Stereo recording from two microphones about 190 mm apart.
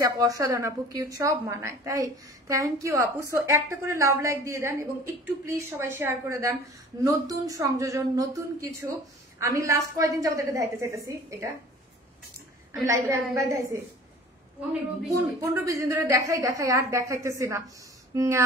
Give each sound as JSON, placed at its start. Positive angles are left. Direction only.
{"t": 0.0, "sound": "a woman's voice", "side_deg": -20}
{"t": 12.8, "sound": "a woman's voice", "side_deg": -15}
{"t": 15.1, "sound": "a woman's voice", "side_deg": -15}